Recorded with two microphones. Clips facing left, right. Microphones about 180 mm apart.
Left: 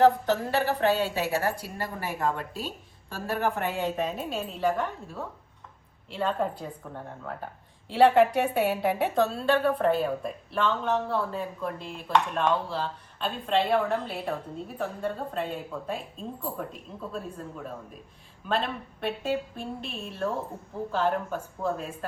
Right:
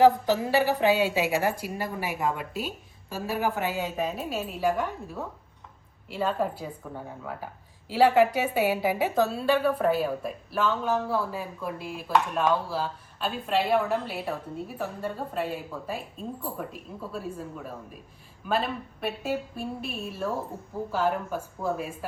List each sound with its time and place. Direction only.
0.0 s a woman's voice: 5° right (ahead or behind)
1.3 s speech: 15° right (ahead or behind)
1.8 s a woman's voice: 5° right (ahead or behind)